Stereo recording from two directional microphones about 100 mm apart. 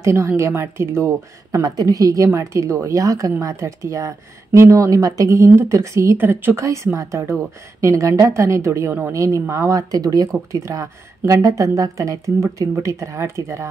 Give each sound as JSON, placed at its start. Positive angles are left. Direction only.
{"t": 0.0, "sound": "a woman's voice", "side_deg": -30}